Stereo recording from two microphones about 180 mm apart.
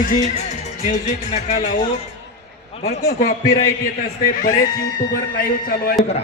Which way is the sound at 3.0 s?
60° left (ahead or behind).